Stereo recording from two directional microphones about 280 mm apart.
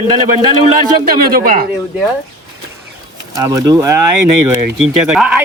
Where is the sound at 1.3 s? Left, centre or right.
Right.